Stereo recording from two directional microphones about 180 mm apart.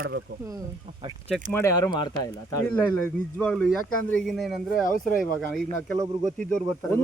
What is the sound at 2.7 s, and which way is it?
Speech, 10° left (ahead or behind).